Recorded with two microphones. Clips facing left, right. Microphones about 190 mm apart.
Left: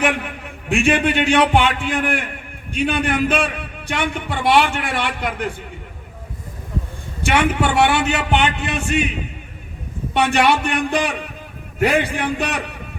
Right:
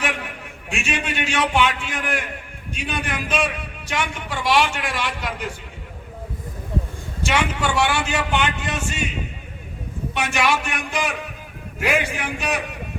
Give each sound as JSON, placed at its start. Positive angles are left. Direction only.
{"t": 0.7, "sound": "a man's voice", "side_deg": 60}
{"t": 7.2, "sound": "a man's voice", "side_deg": 60}
{"t": 10.2, "sound": "a man's voice", "side_deg": 65}